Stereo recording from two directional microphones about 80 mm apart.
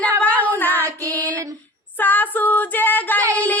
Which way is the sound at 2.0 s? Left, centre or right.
Left.